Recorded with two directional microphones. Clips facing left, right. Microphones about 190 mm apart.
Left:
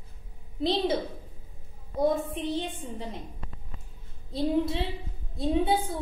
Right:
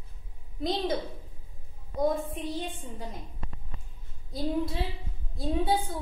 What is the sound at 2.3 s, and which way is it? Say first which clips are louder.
Speech: left 3 dB; 25° left (ahead or behind).